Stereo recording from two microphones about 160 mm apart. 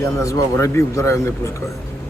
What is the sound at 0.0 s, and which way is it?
Speech, 20° left (ahead or behind).